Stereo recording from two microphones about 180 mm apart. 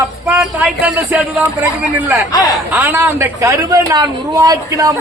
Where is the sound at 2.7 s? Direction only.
15° right (ahead or behind).